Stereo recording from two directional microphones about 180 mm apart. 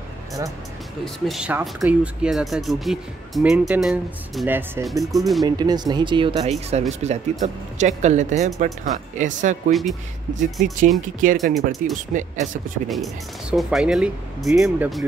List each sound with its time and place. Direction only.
1.0 s speech: centre (ahead or behind)
5.1 s speech: centre (ahead or behind)
5.4 s speech: 20° right (ahead or behind); by 9.6 s 45° right (ahead or behind)
9.7 s speech: centre (ahead or behind)
10.4 s speech: 45° right (ahead or behind)
12.8 s speech: centre (ahead or behind)